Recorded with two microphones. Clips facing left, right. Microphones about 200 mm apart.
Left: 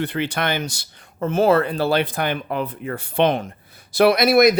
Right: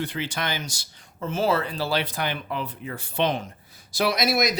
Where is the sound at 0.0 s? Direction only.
60° left (ahead or behind).